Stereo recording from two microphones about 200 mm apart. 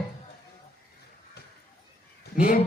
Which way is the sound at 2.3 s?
45° left (ahead or behind).